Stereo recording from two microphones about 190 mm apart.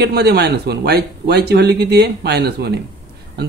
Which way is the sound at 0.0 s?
60° right (ahead or behind).